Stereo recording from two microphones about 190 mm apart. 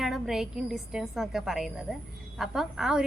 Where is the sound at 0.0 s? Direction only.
Centre (ahead or behind).